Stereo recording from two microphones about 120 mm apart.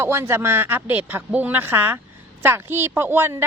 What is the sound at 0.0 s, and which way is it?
A woman's voice, 20° right (ahead or behind).